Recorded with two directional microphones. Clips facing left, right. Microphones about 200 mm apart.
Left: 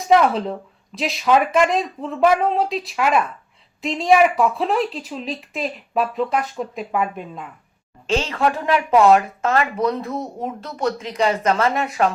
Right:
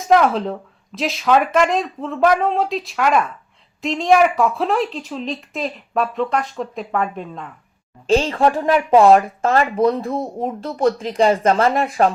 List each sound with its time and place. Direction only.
0.0 s speech: centre (ahead or behind)
8.0 s speech: 35° right (ahead or behind)